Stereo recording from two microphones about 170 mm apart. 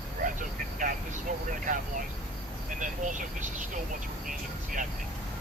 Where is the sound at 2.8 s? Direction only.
50° right (ahead or behind).